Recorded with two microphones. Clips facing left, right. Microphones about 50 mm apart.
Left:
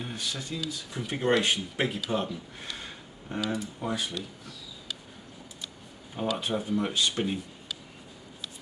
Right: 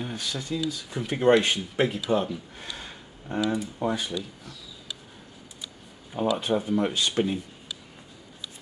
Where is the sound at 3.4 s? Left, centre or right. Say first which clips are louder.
Right 5 dB; centre.